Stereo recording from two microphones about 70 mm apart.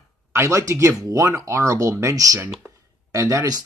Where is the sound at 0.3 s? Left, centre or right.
Right.